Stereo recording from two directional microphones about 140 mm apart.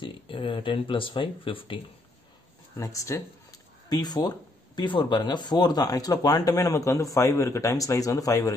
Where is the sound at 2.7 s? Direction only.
20° left (ahead or behind).